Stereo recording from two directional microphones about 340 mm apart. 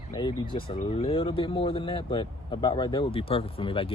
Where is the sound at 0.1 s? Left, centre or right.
Centre.